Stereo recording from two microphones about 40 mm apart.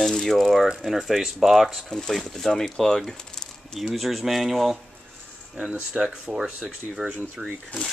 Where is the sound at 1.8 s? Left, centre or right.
Centre.